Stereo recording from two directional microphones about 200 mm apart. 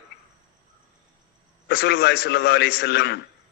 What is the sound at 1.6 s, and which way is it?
A man's voice, 55° left (ahead or behind).